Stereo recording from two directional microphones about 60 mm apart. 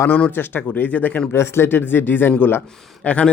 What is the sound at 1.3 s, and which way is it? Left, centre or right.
Speech, left.